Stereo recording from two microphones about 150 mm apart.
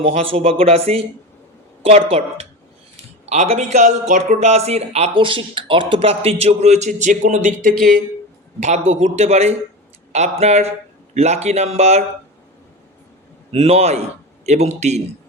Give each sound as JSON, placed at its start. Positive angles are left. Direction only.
{"t": 0.0, "sound": "speech", "side_deg": -40}
{"t": 8.6, "sound": "speech", "side_deg": -45}
{"t": 13.5, "sound": "speech", "side_deg": -40}